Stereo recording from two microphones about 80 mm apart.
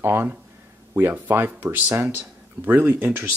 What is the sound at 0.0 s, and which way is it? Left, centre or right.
Speech, right.